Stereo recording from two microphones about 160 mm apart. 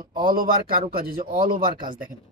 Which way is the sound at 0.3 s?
65° right (ahead or behind).